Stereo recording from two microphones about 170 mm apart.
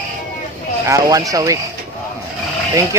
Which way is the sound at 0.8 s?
20° right (ahead or behind).